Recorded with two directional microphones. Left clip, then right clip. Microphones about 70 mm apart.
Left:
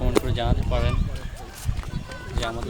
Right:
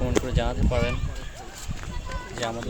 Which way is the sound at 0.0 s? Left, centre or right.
Right.